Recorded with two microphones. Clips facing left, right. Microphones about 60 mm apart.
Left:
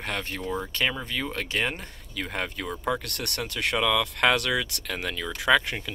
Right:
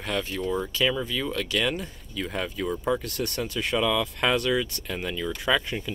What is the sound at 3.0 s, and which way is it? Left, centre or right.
Speech, left.